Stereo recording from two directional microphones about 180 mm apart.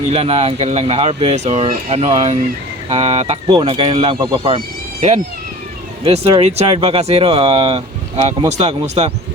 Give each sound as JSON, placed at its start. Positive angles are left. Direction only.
{"t": 0.1, "sound": "speech", "side_deg": -35}
{"t": 6.0, "sound": "speech", "side_deg": -35}